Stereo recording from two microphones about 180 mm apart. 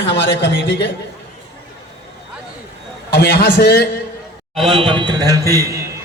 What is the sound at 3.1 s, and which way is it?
Speech, 60° left (ahead or behind).